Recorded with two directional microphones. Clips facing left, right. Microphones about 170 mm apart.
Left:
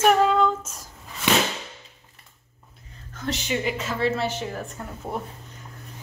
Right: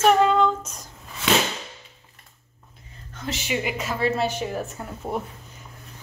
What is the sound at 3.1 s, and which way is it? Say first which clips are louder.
A woman's voice: left 1 dB; centre (ahead or behind).